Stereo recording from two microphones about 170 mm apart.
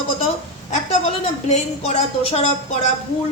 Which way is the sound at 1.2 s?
40° left (ahead or behind).